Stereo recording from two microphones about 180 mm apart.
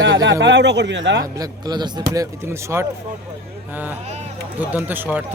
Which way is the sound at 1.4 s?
25° right (ahead or behind).